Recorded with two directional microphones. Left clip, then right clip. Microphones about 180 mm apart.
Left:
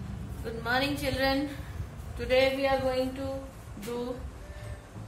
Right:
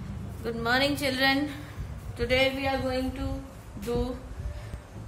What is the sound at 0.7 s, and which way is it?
A woman's voice, 50° right (ahead or behind).